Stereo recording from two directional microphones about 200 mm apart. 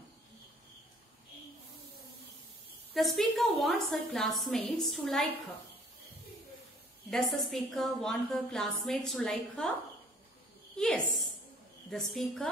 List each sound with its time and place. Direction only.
2.9 s a woman's voice: centre (ahead or behind)
7.1 s a woman's voice: centre (ahead or behind)
10.8 s a woman's voice: 5° left (ahead or behind)